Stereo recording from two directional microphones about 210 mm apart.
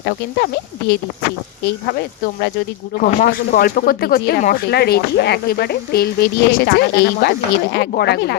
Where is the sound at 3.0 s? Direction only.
45° left (ahead or behind).